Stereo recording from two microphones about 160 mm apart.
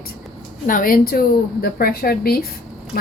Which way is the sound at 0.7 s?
60° left (ahead or behind).